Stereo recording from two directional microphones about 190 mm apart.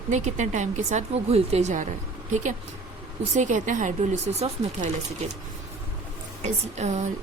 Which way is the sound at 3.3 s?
40° right (ahead or behind).